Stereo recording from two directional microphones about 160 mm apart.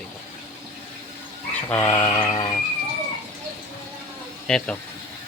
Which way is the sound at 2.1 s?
25° left (ahead or behind).